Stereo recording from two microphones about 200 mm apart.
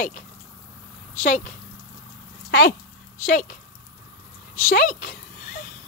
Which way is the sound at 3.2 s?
40° left (ahead or behind).